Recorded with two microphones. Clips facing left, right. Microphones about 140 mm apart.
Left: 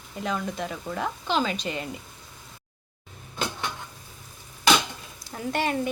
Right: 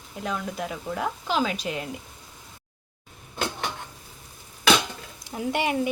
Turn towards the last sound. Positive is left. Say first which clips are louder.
# right 1 dB
turn(degrees=-10)  # may be behind; listen again after turning